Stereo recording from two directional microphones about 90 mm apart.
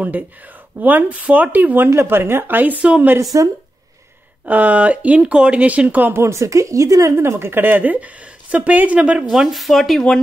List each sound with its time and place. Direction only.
0.7 s speech: 20° right (ahead or behind)
4.5 s speech: 15° right (ahead or behind)
9.3 s speech: 5° right (ahead or behind)